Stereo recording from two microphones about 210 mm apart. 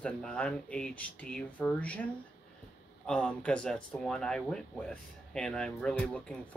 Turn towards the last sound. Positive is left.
turn(degrees=5)  # may be behind; listen again after turning